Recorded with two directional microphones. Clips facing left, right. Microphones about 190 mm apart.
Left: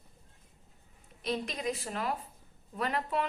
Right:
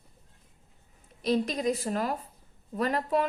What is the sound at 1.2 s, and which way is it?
A woman's voice, 40° right (ahead or behind).